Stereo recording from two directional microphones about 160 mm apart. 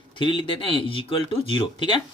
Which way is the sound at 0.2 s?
30° left (ahead or behind).